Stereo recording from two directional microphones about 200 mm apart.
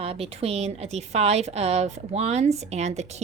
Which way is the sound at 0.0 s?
30° right (ahead or behind).